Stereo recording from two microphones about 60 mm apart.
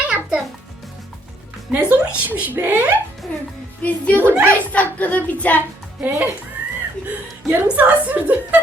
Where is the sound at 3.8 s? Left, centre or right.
Left.